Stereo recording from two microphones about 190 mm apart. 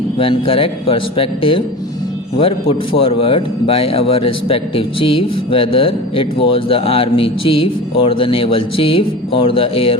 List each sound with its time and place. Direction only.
0.2 s a man's voice: 30° left (ahead or behind)